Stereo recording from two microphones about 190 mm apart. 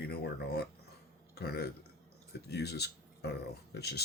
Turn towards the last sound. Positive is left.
turn(degrees=60)  # may be behind; listen again after turning